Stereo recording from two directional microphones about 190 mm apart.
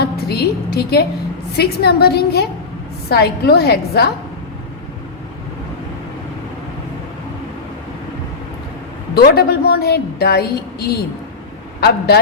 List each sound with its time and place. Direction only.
0.0 s a woman's voice: 55° left (ahead or behind)
9.1 s a woman's voice: 55° left (ahead or behind)